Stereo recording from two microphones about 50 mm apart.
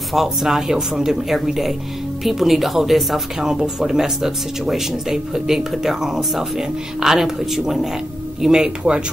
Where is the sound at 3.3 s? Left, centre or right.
Centre.